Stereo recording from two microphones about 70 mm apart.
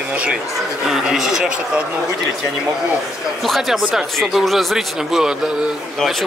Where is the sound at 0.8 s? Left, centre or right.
Centre.